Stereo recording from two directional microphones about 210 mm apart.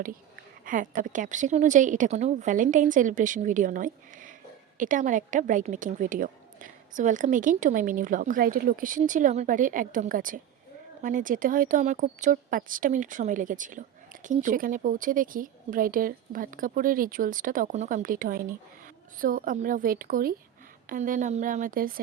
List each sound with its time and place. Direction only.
0.6 s a woman's voice: 40° right (ahead or behind)